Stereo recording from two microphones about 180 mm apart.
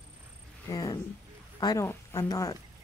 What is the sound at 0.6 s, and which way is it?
Speech, 20° left (ahead or behind).